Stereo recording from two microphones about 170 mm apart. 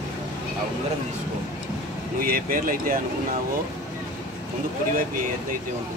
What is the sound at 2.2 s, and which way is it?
Speech, 55° right (ahead or behind).